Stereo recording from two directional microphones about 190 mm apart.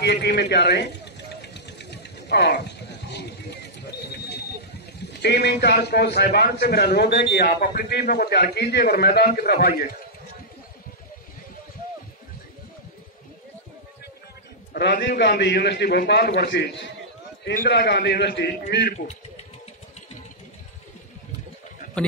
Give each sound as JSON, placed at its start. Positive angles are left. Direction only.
{"t": 0.0, "sound": "a sound", "side_deg": 60}
{"t": 5.2, "sound": "a man's voice", "side_deg": 60}
{"t": 14.7, "sound": "a man's voice", "side_deg": 60}